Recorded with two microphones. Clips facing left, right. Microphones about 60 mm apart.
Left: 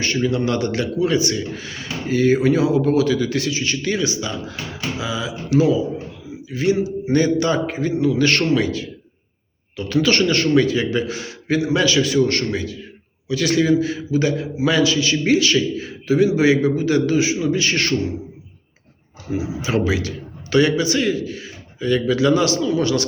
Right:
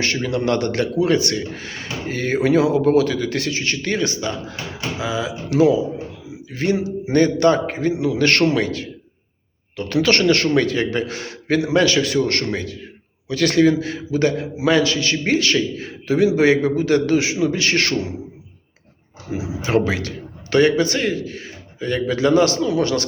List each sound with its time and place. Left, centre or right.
0.0 s speech: right
6.5 s a man's voice: right
16.1 s a man's voice: right
19.6 s a man's voice: right